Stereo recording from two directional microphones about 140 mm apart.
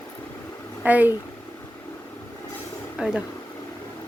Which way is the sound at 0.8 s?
10° right (ahead or behind).